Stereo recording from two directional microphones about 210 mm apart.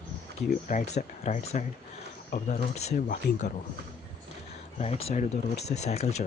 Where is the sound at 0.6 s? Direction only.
35° left (ahead or behind).